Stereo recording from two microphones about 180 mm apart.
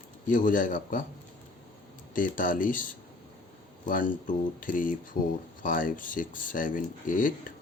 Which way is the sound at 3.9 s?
50° left (ahead or behind).